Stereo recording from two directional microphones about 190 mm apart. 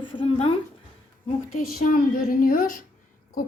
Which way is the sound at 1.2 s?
45° left (ahead or behind).